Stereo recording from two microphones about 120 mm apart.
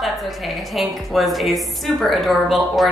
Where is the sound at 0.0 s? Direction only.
Centre (ahead or behind).